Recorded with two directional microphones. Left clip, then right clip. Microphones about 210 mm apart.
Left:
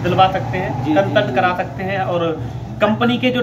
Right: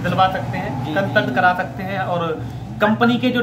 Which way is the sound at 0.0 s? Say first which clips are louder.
Left 3 dB; 20° right (ahead or behind).